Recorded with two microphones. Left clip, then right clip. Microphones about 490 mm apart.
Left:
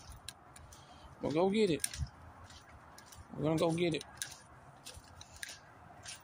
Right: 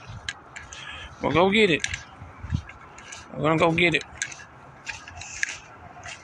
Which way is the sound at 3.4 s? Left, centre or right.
Left.